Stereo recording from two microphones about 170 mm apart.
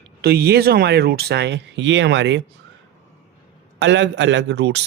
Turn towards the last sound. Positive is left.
turn(degrees=-90)